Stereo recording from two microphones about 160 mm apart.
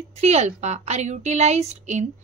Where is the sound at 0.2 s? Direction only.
45° right (ahead or behind).